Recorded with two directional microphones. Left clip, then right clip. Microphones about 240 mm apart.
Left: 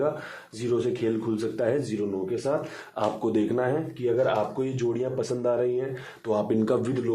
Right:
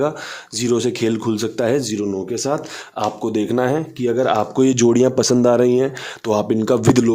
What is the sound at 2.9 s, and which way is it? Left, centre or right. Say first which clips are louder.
Speech: right 5 dB; right.